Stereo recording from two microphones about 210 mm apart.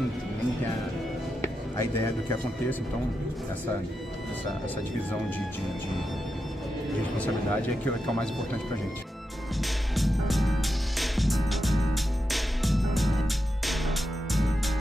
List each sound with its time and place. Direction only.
1.4 s music: 15° left (ahead or behind)
7.2 s speech: 5° left (ahead or behind)
9.6 s music: centre (ahead or behind)